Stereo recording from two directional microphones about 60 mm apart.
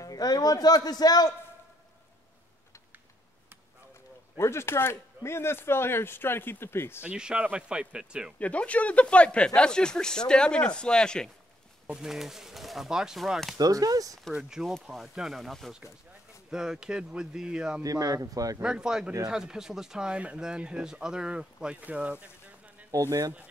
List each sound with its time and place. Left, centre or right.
0.0 s a man's voice: left
4.4 s speech: left
7.0 s speech: centre
8.4 s speech: left
11.9 s speech: centre
13.6 s speech: right
14.9 s speech: centre
16.4 s speech: centre
17.8 s speech: right
18.6 s speech: centre
22.8 s speech: right